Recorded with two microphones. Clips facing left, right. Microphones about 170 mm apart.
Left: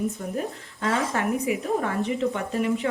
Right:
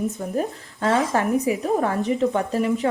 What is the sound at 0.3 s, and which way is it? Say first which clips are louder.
Speech: right 5 dB; 40° right (ahead or behind).